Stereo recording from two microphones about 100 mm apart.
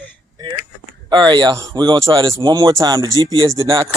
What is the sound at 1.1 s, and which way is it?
Speech, 50° right (ahead or behind).